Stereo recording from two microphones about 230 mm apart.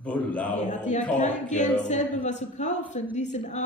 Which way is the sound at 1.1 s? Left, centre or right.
Left.